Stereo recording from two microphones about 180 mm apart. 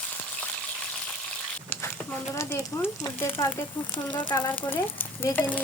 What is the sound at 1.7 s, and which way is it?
Speech, 10° left (ahead or behind).